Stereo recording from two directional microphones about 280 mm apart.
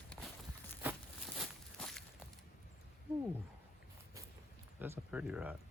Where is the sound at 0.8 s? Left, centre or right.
Centre.